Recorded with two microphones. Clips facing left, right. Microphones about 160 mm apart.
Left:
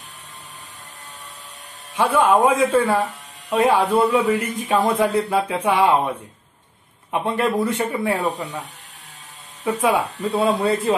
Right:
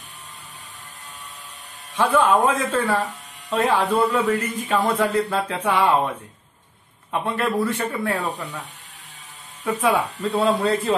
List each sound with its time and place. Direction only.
2.0 s speech: 10° left (ahead or behind)
7.1 s speech: 15° left (ahead or behind)
9.8 s speech: 10° left (ahead or behind)